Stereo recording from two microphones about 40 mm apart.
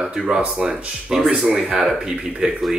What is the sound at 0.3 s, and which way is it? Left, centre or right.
Speech, centre.